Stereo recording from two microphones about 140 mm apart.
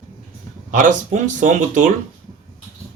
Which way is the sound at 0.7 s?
65° right (ahead or behind).